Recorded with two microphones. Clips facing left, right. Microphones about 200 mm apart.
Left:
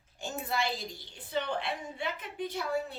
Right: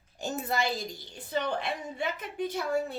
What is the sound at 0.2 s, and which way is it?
A woman's voice, 40° right (ahead or behind).